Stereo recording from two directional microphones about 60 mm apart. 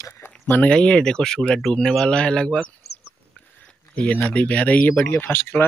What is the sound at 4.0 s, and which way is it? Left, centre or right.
Speech, left.